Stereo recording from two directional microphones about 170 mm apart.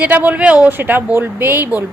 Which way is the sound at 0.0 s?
10° right (ahead or behind).